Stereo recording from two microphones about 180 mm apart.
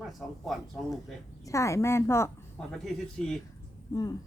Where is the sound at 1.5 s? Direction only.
15° left (ahead or behind).